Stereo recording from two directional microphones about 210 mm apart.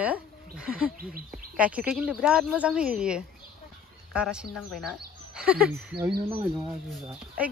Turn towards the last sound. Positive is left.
turn(degrees=-5)  # may be behind; listen again after turning